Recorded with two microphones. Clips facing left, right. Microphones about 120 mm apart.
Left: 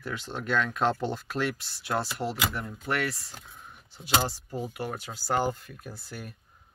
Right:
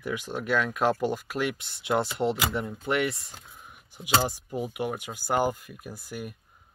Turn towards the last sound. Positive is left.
turn(degrees=-10)  # may be behind; listen again after turning